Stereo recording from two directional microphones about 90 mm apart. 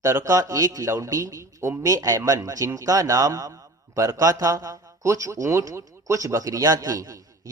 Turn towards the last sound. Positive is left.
turn(degrees=-40)  # may be behind; listen again after turning